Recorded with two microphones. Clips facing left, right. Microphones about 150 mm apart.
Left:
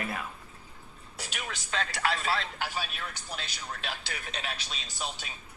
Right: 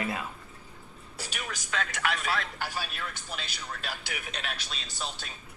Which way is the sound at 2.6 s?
Centre (ahead or behind).